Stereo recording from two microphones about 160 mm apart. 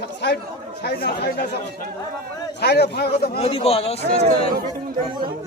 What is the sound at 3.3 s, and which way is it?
Speech, 40° left (ahead or behind).